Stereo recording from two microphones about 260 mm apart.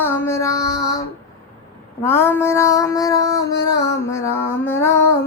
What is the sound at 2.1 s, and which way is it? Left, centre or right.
Speech, centre.